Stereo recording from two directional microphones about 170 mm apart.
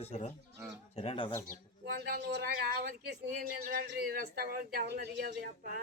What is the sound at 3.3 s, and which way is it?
A man's voice, 60° right (ahead or behind).